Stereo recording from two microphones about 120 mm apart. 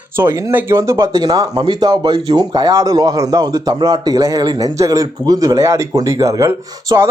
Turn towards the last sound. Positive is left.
turn(degrees=-25)  # may be behind; listen again after turning